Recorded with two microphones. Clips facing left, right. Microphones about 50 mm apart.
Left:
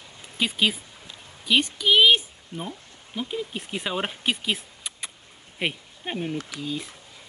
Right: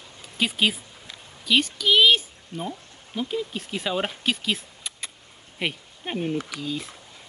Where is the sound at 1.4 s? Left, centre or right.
Centre.